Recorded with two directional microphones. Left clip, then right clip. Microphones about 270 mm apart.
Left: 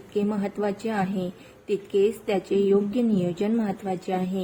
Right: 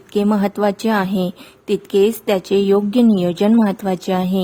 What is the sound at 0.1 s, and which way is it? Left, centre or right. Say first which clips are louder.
A woman's voice: right 9 dB; right.